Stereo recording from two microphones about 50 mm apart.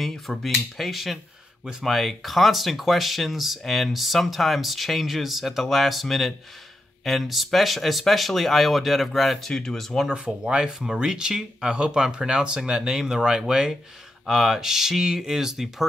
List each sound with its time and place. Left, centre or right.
0.4 s speech: centre
9.5 s speech: centre
10.0 s speech: centre